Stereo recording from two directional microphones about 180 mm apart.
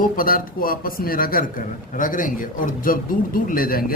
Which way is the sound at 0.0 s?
50° left (ahead or behind).